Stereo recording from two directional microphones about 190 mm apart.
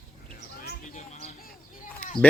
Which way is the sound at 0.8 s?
40° left (ahead or behind).